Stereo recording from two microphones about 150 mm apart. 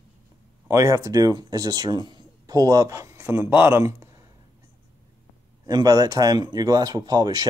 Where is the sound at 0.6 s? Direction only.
20° right (ahead or behind).